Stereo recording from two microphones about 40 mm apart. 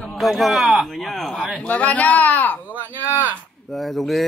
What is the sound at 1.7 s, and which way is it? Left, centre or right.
Speech, left.